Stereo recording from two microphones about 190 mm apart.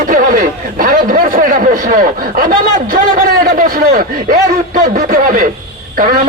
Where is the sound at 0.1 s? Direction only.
45° right (ahead or behind).